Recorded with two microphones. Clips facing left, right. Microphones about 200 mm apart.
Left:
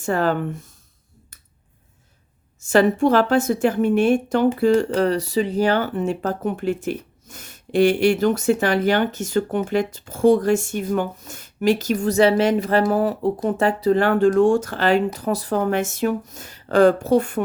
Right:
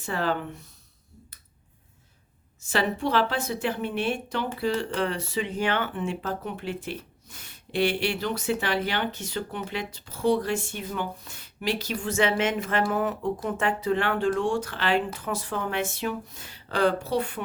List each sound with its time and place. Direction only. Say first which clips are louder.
0.0 s a woman's voice: left 7 dB; 45° left (ahead or behind)
2.6 s a woman's voice: left 10 dB; 45° left (ahead or behind)